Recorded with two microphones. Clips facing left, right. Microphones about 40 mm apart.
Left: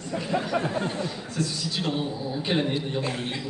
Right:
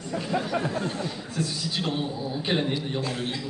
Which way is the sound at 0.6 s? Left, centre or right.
Left.